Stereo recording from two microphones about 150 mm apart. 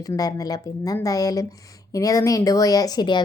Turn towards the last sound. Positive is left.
turn(degrees=30)  # may be behind; listen again after turning